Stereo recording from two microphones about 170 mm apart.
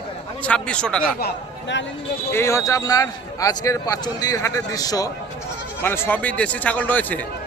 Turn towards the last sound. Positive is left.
turn(degrees=10)  # may be behind; listen again after turning